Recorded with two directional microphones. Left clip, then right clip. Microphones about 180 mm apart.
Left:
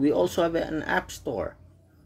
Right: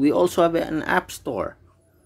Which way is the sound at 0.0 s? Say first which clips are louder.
Right 5 dB; 25° right (ahead or behind).